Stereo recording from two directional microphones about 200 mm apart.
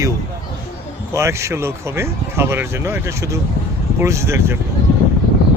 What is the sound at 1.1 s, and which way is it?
Speech, 15° right (ahead or behind).